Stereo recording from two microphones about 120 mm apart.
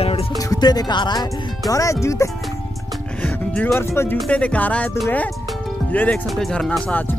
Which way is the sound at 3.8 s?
20° left (ahead or behind).